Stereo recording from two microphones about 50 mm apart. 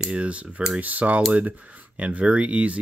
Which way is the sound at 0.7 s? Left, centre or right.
Right.